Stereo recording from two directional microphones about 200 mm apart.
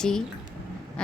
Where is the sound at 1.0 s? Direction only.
5° left (ahead or behind).